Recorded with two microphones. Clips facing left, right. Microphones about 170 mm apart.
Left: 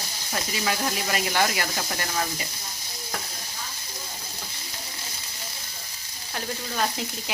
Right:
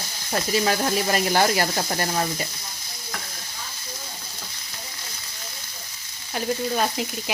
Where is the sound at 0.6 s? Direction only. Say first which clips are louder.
Right 5 dB; 40° right (ahead or behind).